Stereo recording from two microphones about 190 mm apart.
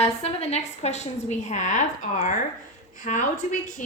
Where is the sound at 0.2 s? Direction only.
35° left (ahead or behind).